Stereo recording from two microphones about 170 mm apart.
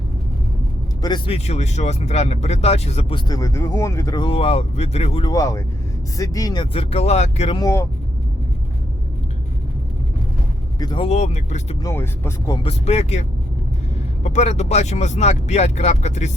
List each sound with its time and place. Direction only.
1.0 s speech: 30° left (ahead or behind)
3.2 s speech: 20° left (ahead or behind); by 5.2 s 40° left (ahead or behind)
5.2 s speech: 20° left (ahead or behind); by 7.6 s 40° left (ahead or behind)
7.6 s speech: 15° left (ahead or behind)
10.8 s speech: 25° left (ahead or behind)
11.8 s speech: 15° left (ahead or behind)
12.6 s speech: 40° left (ahead or behind)
14.3 s speech: 40° left (ahead or behind)